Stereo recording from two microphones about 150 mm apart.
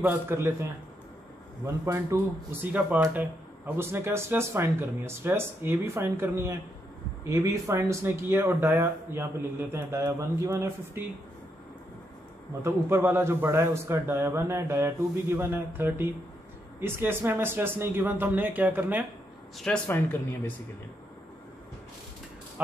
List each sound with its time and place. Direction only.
0.0 s speech: 15° right (ahead or behind)
1.9 s speech: 15° right (ahead or behind)
12.6 s speech: 15° right (ahead or behind)
19.6 s speech: 10° left (ahead or behind)